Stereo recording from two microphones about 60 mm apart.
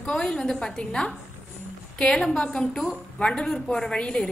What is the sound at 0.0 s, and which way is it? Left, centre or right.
A woman's voice, centre.